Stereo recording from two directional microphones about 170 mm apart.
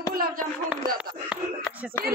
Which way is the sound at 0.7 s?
5° right (ahead or behind).